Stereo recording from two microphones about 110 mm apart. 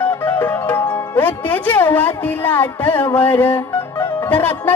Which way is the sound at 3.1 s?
20° left (ahead or behind).